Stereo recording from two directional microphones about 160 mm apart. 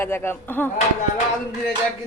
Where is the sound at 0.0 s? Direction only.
15° left (ahead or behind).